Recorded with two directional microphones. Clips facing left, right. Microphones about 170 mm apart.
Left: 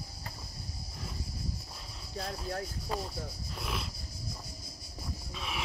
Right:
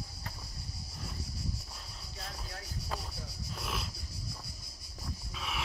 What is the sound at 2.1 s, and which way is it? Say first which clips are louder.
Speech: left 10 dB; 35° left (ahead or behind).